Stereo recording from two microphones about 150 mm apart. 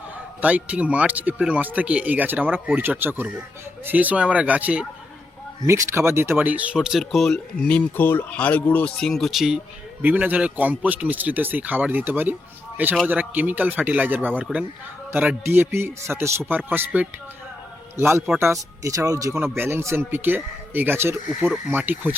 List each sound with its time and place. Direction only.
0.4 s a man's voice: 10° right (ahead or behind)